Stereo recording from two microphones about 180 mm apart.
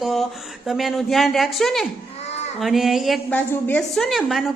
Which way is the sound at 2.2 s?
35° left (ahead or behind).